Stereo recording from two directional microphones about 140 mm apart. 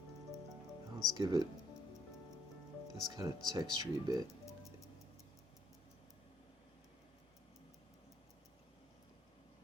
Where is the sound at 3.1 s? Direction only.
25° right (ahead or behind).